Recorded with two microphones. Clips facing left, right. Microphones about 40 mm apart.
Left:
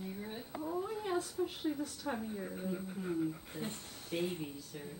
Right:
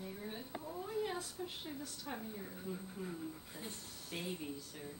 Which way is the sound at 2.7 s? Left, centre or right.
Left.